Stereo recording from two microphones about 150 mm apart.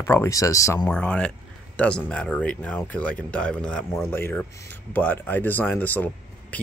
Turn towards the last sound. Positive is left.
turn(degrees=10)  # may be behind; listen again after turning